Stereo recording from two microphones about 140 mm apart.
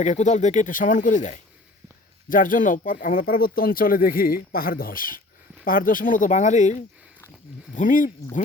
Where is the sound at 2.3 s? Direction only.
75° left (ahead or behind); by 5.2 s 90° left.